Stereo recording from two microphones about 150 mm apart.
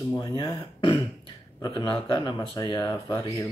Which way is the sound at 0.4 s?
25° left (ahead or behind).